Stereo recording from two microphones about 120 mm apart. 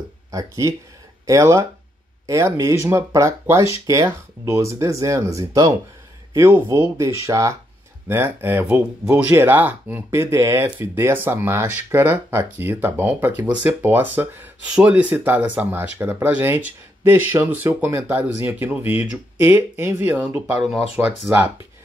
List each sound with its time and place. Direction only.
0.3 s speech: 25° right (ahead or behind)